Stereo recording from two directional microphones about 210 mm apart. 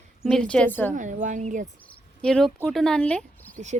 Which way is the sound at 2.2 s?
Centre (ahead or behind).